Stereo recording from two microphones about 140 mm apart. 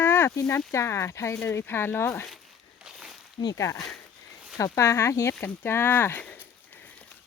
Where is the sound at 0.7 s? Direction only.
20° left (ahead or behind).